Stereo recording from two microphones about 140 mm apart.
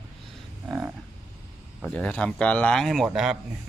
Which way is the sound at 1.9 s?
10° left (ahead or behind).